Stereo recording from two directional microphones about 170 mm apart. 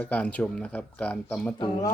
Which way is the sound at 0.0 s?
10° left (ahead or behind).